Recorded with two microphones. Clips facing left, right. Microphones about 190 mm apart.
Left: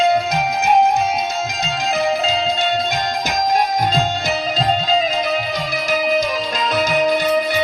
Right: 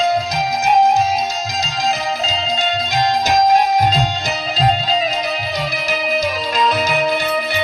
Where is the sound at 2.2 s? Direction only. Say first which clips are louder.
Left 2 dB; 55° left (ahead or behind).